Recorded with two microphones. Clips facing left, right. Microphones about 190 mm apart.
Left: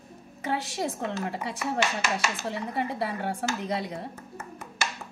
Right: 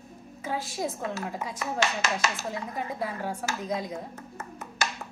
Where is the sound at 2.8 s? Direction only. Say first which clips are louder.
Left 4 dB; 70° left (ahead or behind).